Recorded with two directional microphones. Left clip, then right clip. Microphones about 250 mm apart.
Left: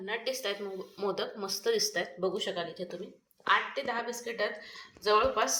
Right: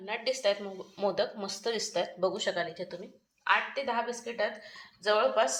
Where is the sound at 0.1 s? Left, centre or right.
Right.